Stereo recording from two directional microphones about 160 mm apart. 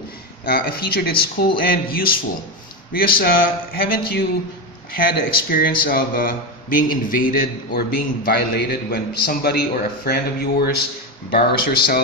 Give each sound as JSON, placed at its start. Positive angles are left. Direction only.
{"t": 0.5, "sound": "a man's voice", "side_deg": 70}